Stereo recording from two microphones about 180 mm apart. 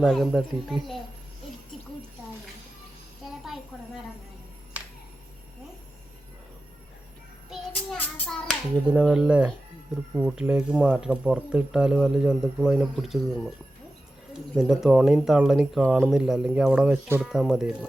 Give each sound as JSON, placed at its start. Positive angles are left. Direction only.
{"t": 0.0, "sound": "speech", "side_deg": 0}
{"t": 3.2, "sound": "a sound", "side_deg": 0}
{"t": 7.7, "sound": "child singing", "side_deg": 10}
{"t": 8.9, "sound": "speech", "side_deg": -5}